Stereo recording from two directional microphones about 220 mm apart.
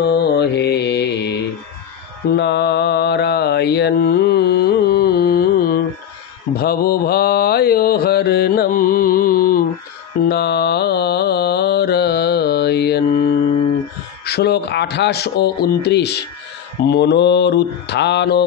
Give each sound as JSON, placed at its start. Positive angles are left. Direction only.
{"t": 0.0, "sound": "mantra", "side_deg": 45}
{"t": 2.3, "sound": "mantra", "side_deg": 50}
{"t": 14.2, "sound": "speech", "side_deg": 50}